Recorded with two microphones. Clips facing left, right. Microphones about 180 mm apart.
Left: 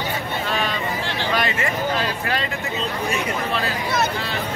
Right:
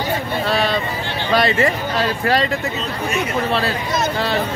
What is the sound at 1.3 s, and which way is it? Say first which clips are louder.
Speech: right 8 dB; 35° right (ahead or behind).